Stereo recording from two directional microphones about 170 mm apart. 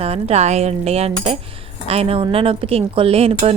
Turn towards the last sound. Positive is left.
turn(degrees=-35)  # may be behind; listen again after turning